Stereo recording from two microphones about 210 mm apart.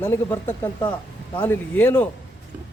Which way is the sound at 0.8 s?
25° left (ahead or behind).